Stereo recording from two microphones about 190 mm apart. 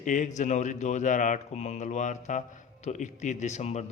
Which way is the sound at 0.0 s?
40° left (ahead or behind).